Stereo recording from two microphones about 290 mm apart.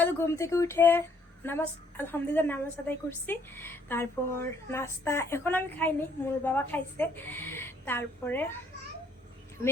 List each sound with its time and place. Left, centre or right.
0.0 s a woman's voice: centre